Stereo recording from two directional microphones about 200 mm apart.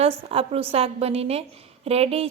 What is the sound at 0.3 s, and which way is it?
Speech, 30° right (ahead or behind).